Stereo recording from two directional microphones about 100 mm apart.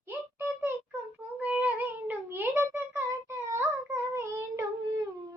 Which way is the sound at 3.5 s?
25° right (ahead or behind).